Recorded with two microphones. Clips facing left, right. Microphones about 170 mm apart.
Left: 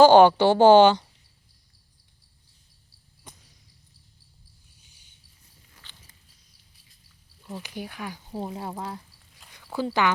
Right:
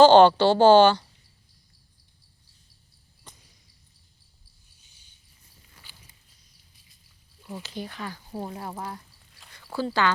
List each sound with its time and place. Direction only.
0.0 s a woman's voice: 10° left (ahead or behind)
5.8 s biting: 10° right (ahead or behind)
7.6 s a woman's voice: 10° left (ahead or behind)
8.6 s a sound: 20° left (ahead or behind)